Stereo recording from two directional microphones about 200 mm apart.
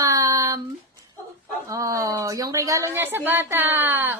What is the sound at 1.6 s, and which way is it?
A woman's voice, 15° right (ahead or behind).